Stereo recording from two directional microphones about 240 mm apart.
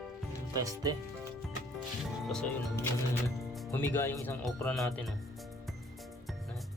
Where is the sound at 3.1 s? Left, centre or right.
Centre.